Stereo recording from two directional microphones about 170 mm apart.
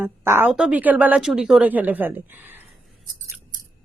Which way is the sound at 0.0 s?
10° right (ahead or behind).